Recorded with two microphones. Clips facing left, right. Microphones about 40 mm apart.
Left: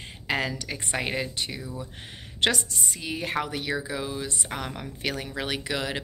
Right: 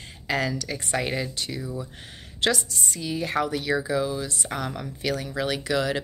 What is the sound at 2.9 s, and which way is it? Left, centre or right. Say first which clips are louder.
Speech: right 3 dB; left.